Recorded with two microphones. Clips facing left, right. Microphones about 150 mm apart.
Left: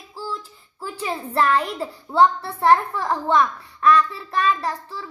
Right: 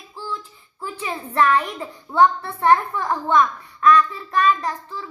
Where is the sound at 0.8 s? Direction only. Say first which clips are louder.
Left 1 dB; 35° left (ahead or behind).